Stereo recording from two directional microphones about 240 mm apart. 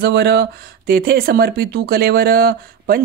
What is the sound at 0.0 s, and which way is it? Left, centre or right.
Speech, right.